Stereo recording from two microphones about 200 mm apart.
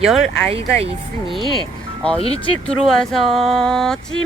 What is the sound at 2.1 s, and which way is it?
Speech, 30° left (ahead or behind).